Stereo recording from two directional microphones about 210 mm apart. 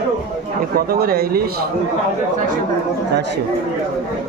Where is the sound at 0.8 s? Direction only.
45° right (ahead or behind).